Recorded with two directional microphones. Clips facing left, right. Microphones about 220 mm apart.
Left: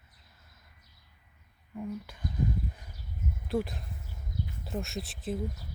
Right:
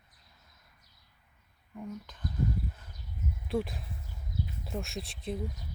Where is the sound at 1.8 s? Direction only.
10° left (ahead or behind).